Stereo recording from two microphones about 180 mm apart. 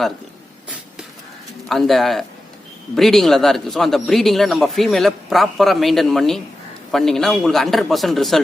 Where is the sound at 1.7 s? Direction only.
Centre (ahead or behind).